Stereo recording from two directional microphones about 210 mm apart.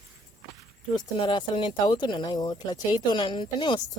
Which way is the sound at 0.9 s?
20° left (ahead or behind).